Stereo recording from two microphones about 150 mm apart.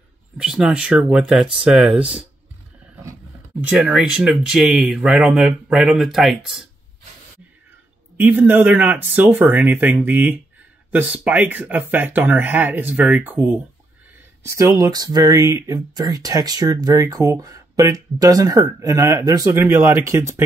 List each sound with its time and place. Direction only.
0.4 s speech: 5° right (ahead or behind)
3.6 s speech: 10° right (ahead or behind)
8.2 s speech: 15° right (ahead or behind)